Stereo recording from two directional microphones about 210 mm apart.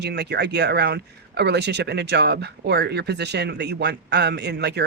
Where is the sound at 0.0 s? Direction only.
50° right (ahead or behind).